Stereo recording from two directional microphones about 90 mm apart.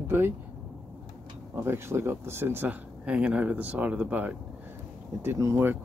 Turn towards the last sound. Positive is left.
turn(degrees=-35)  # may be behind; listen again after turning